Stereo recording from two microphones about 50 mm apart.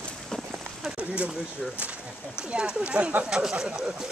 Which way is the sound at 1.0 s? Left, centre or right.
Right.